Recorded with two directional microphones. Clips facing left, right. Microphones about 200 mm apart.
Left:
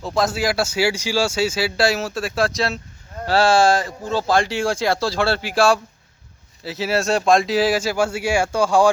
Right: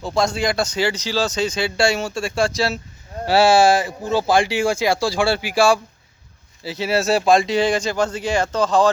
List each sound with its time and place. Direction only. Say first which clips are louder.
0.0 s speech: even; centre (ahead or behind)